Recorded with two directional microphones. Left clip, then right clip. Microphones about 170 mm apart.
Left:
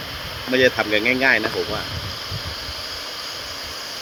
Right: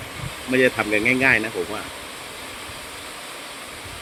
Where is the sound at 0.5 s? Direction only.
15° right (ahead or behind).